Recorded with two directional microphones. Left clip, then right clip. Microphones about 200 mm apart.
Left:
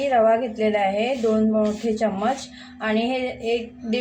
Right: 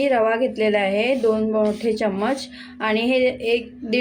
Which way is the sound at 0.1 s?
50° right (ahead or behind).